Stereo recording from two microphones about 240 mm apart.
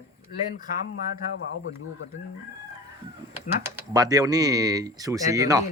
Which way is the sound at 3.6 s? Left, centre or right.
Centre.